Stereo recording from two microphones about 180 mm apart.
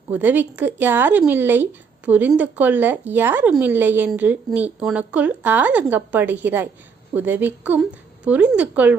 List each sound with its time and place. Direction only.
0.1 s speech: 10° right (ahead or behind)